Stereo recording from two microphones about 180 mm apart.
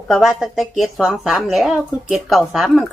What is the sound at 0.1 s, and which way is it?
Speech, centre (ahead or behind).